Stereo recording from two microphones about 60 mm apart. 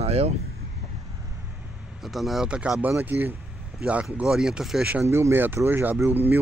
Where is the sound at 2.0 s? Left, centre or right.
Centre.